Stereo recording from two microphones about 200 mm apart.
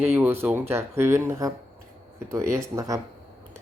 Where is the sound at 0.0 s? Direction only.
10° right (ahead or behind).